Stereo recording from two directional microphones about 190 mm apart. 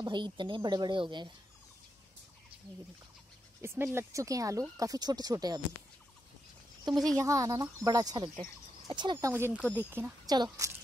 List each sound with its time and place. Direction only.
0.0 s speech: 25° right (ahead or behind)
3.6 s speech: 15° right (ahead or behind)
7.2 s speech: 15° right (ahead or behind)
9.3 s speech: 10° right (ahead or behind)